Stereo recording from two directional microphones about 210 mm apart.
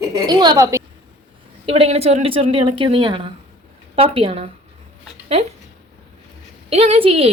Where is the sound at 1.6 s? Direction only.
30° right (ahead or behind).